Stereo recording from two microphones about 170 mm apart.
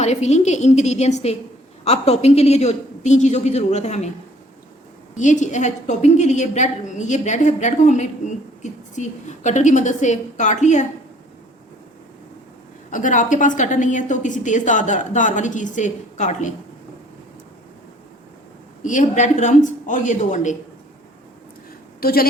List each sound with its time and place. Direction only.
0.0 s a woman's voice: 40° left (ahead or behind)
5.1 s a woman's voice: 45° left (ahead or behind)
12.9 s a woman's voice: 50° left (ahead or behind)
18.8 s a woman's voice: 50° left (ahead or behind)
22.0 s a woman's voice: 60° left (ahead or behind)